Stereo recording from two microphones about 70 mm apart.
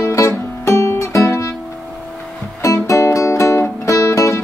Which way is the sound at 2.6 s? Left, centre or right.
Left.